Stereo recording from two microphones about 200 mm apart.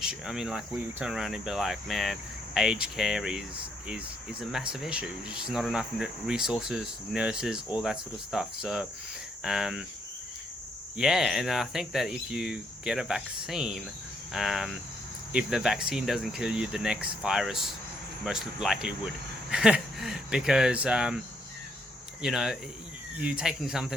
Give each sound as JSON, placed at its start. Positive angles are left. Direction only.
{"t": 0.0, "sound": "speech", "side_deg": -5}
{"t": 10.9, "sound": "speech", "side_deg": 0}
{"t": 22.2, "sound": "speech", "side_deg": 0}